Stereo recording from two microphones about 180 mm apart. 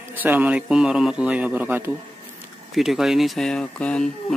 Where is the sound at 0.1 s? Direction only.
10° right (ahead or behind).